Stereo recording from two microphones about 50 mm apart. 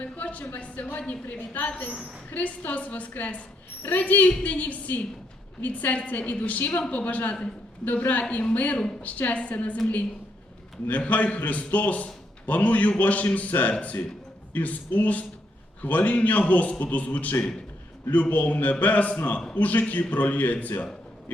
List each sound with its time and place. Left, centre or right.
0.0 s a sound: left
0.5 s a man's voice: left
1.9 s a woman's voice: right
2.3 s a man's voice: left
10.8 s a man's voice: left